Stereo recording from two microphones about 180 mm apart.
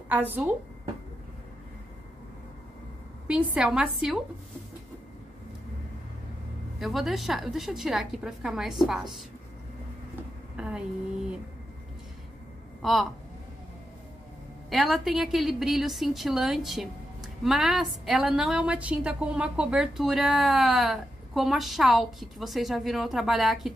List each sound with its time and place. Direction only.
0.1 s speech: 10° right (ahead or behind)
3.3 s a woman's voice: 5° right (ahead or behind)
6.8 s a woman's voice: centre (ahead or behind)
10.5 s a sound: 5° right (ahead or behind)
14.7 s a woman's voice: centre (ahead or behind)